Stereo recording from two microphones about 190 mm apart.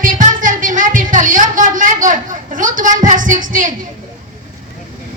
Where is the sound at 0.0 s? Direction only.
45° right (ahead or behind).